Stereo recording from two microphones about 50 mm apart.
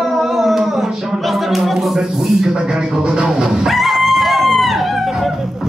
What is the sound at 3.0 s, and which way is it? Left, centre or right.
Music, centre.